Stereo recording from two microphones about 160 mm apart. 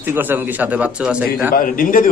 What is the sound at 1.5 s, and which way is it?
Speech, 60° left (ahead or behind).